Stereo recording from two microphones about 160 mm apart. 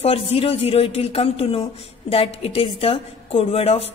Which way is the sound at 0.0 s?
40° left (ahead or behind).